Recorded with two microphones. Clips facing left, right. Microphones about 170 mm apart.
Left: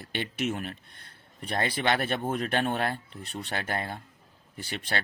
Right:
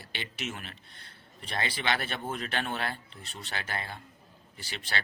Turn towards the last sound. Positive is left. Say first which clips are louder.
# left 5 dB
turn(degrees=50)  # may be behind; listen again after turning